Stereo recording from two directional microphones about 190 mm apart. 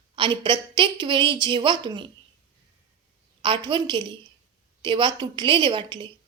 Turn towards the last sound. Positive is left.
turn(degrees=-25)  # may be behind; listen again after turning